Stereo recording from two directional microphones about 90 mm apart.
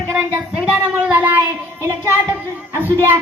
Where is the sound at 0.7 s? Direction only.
15° right (ahead or behind).